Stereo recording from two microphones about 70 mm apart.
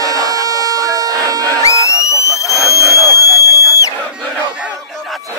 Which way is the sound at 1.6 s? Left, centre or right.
Left.